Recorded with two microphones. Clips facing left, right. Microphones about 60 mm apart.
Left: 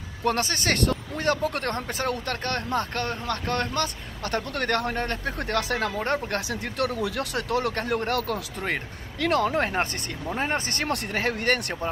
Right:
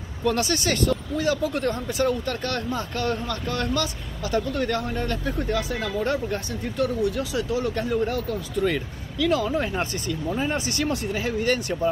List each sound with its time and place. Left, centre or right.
0.2 s speech: left
4.5 s speech: left
5.4 s speech: left
5.9 s speech: left
6.3 s speech: left
7.3 s speech: left
8.5 s speech: left
10.3 s speech: left
10.9 s speech: left